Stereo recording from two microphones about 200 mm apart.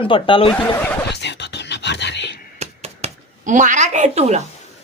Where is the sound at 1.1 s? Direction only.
60° left (ahead or behind).